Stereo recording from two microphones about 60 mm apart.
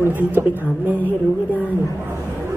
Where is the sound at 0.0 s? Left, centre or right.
Right.